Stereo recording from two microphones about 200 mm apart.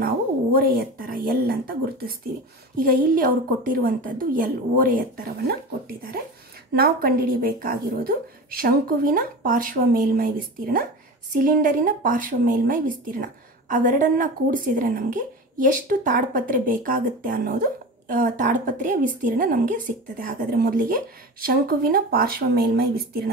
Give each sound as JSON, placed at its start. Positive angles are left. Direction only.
{"t": 0.0, "sound": "speech", "side_deg": -50}